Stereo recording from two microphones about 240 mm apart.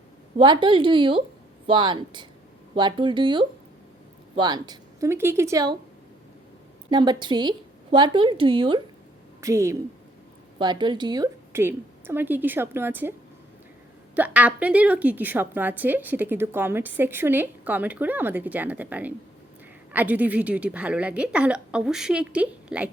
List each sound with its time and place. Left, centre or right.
0.3 s a woman's voice: centre
6.9 s a woman's voice: centre
14.2 s a woman's voice: centre